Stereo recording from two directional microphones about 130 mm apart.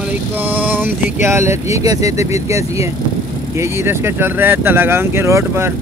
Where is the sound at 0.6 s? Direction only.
15° right (ahead or behind).